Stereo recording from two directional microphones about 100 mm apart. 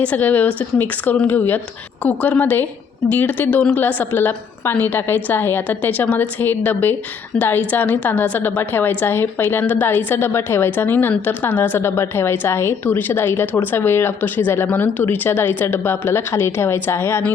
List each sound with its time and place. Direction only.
0.0 s a woman's voice: 15° left (ahead or behind)